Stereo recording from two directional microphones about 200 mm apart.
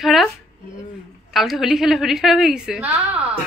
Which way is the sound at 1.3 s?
Centre (ahead or behind).